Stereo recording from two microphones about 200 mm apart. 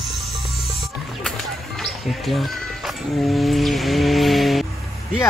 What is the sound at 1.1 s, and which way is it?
Speech, centre (ahead or behind).